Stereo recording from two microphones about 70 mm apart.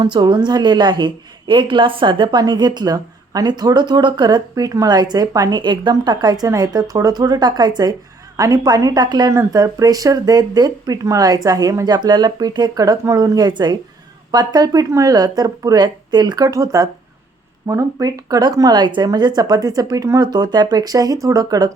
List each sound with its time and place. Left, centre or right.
0.0 s a woman's voice: right
6.5 s speech: right
8.4 s speech: right
9.5 s speech: right
11.0 s speech: right
11.9 s speech: right
14.3 s speech: right
20.2 s speech: right